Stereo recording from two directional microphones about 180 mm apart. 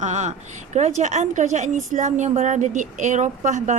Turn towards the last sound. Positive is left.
turn(degrees=-40)  # may be behind; listen again after turning